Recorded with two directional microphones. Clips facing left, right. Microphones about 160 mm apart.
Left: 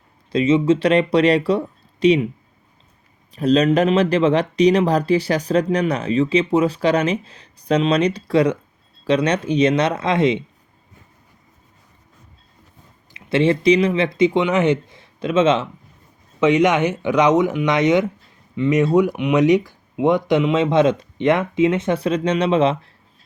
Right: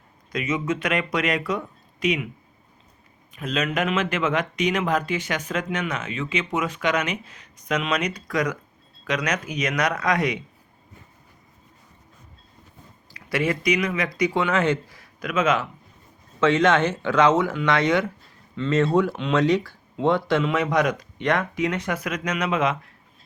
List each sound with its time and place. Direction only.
0.3 s speech: 30° left (ahead or behind)
3.3 s speech: 35° left (ahead or behind)
13.1 s speech: 25° left (ahead or behind)
16.4 s speech: 15° left (ahead or behind)